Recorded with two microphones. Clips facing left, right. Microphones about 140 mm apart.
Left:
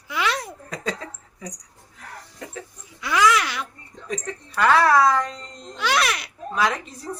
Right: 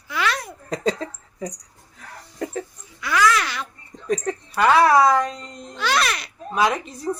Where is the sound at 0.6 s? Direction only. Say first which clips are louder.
Right 11 dB; 30° right (ahead or behind).